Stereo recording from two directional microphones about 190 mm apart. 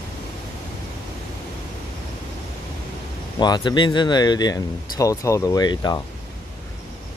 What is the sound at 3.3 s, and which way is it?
Speech, 20° left (ahead or behind).